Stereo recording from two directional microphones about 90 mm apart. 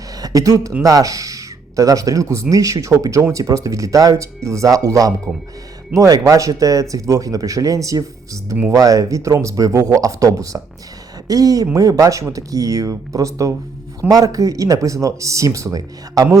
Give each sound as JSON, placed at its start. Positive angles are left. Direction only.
{"t": 0.2, "sound": "speech", "side_deg": -40}